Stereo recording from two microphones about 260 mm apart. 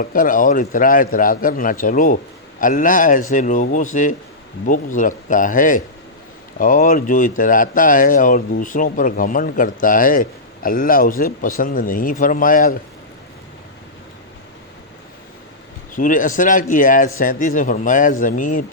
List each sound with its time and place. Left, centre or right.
0.0 s speech: left
16.0 s speech: left